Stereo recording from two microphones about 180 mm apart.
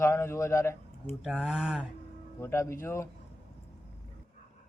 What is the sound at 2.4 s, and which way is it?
Speech, 15° left (ahead or behind).